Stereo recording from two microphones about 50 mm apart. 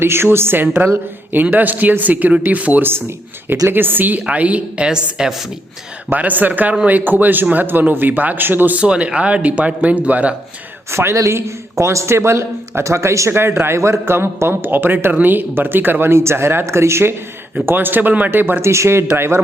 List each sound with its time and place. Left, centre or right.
0.0 s speech: right
3.5 s speech: right
4.3 s speech: right
4.9 s a woman's voice: centre
6.1 s speech: right
8.7 s speech: right
10.9 s a man's voice: right
13.3 s speech: right
17.7 s speech: right
18.6 s speech: right